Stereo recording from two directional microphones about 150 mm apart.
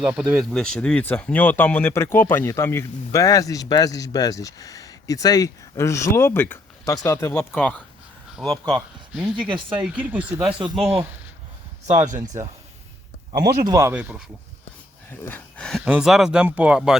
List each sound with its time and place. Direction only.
0.0 s speech: 5° right (ahead or behind); by 7.3 s 20° left (ahead or behind)
7.3 s speech: 10° left (ahead or behind)
9.3 s speech: 35° right (ahead or behind)
9.8 s speech: 10° right (ahead or behind)
11.9 s speech: 55° right (ahead or behind)
13.3 s speech: 90° right
13.7 s speech: 10° right (ahead or behind)
15.1 s speech: 10° left (ahead or behind)
15.8 s speech: 5° right (ahead or behind)